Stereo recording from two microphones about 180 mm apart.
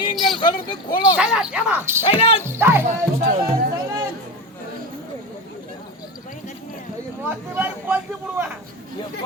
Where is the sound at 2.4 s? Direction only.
15° right (ahead or behind).